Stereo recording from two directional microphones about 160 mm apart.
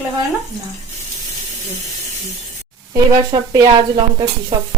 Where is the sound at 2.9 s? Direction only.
25° right (ahead or behind).